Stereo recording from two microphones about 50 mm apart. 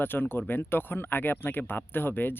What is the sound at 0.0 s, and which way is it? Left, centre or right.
Speech, left.